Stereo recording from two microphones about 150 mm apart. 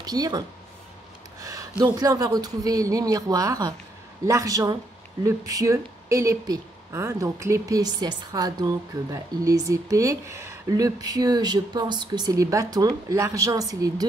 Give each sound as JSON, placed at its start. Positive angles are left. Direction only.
{"t": 0.0, "sound": "speech", "side_deg": -25}
{"t": 1.4, "sound": "speech", "side_deg": -20}